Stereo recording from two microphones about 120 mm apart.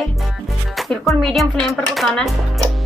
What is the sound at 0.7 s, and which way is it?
Music, centre (ahead or behind).